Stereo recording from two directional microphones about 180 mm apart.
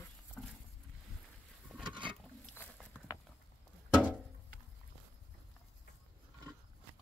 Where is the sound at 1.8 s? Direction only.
25° right (ahead or behind).